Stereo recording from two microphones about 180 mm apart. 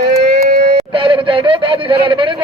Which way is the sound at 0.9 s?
30° right (ahead or behind).